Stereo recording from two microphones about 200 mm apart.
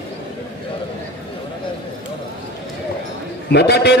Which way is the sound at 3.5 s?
55° left (ahead or behind).